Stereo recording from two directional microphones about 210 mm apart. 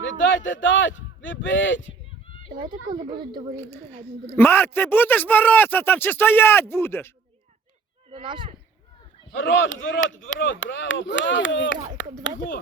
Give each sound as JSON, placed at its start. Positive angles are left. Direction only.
{"t": 0.0, "sound": "speech", "side_deg": 60}
{"t": 2.6, "sound": "speech", "side_deg": -20}
{"t": 3.6, "sound": "a man's voice", "side_deg": 10}
{"t": 8.1, "sound": "speech", "side_deg": -25}
{"t": 9.3, "sound": "speech", "side_deg": 60}